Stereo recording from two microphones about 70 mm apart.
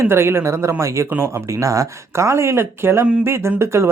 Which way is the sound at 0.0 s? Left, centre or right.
Right.